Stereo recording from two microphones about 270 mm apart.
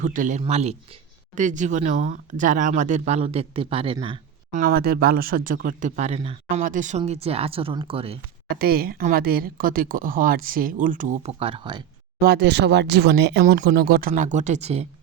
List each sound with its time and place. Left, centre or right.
0.0 s speech: right
4.6 s speech: right
8.4 s speech: right; by 11.9 s centre
12.2 s speech: right